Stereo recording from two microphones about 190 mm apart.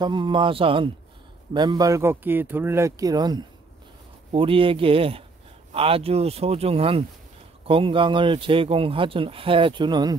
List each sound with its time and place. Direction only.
0.0 s speech: 25° right (ahead or behind)